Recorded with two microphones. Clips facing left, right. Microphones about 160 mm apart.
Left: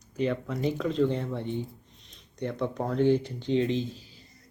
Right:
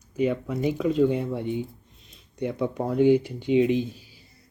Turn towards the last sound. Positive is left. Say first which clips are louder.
# right 4 dB
turn(degrees=-10)  # may be behind; listen again after turning